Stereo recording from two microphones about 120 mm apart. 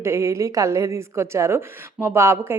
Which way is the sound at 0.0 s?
25° right (ahead or behind).